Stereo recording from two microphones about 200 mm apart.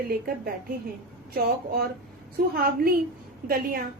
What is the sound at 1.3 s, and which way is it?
Speech, 50° right (ahead or behind).